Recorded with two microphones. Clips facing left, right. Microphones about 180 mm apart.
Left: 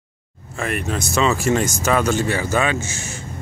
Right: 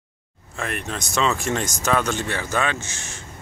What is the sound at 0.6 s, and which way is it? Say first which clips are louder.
Speech: left 5 dB; 5° left (ahead or behind).